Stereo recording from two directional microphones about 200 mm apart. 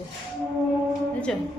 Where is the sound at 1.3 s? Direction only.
Centre (ahead or behind).